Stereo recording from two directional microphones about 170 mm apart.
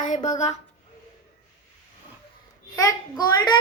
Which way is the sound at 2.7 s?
20° left (ahead or behind).